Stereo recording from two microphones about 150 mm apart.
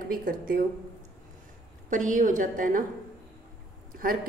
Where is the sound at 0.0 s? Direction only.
70° right (ahead or behind).